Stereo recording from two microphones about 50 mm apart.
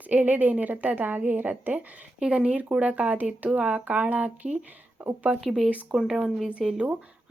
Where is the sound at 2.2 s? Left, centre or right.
Centre.